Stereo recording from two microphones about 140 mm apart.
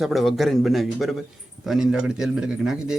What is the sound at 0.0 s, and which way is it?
A man's voice, centre (ahead or behind).